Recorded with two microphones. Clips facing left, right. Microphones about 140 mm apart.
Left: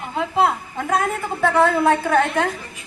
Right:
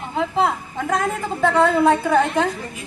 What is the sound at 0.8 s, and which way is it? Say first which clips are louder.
Speech: left 1 dB; 10° left (ahead or behind).